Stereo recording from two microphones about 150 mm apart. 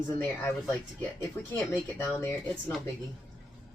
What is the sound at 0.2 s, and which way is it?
Speech, 15° left (ahead or behind).